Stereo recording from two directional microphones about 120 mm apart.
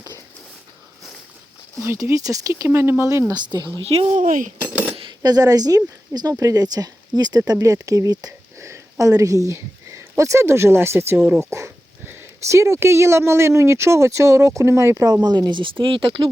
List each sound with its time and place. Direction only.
1.8 s speech: 20° right (ahead or behind)
4.1 s dishes: 90° right
4.6 s cutlery: 20° right (ahead or behind)
4.9 s speech: 40° right (ahead or behind)